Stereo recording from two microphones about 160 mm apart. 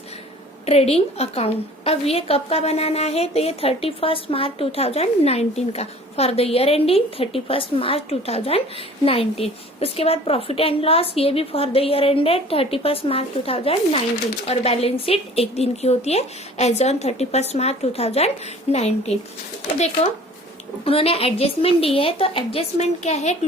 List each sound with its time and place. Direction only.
0.6 s a woman's voice: 40° left (ahead or behind)
20.8 s a woman's voice: 35° left (ahead or behind)